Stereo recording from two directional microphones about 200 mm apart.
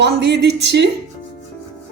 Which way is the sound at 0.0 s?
60° right (ahead or behind).